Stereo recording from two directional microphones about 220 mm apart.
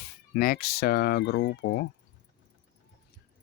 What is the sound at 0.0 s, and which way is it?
Speech, 40° left (ahead or behind).